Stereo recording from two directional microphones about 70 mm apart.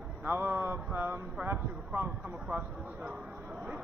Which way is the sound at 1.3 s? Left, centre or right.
Right.